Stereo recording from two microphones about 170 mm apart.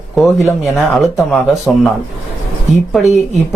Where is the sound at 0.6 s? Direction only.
Centre (ahead or behind).